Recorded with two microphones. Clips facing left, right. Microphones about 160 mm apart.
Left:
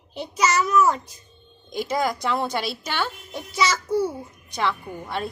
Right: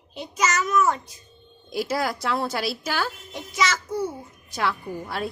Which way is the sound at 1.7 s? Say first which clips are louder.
Left 1 dB; 5° right (ahead or behind).